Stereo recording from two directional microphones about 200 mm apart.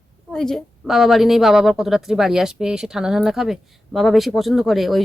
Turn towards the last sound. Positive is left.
turn(degrees=0)  # may be behind; listen again after turning